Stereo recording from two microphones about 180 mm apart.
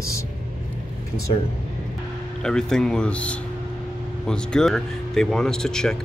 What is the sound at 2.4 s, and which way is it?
Speech, 5° left (ahead or behind).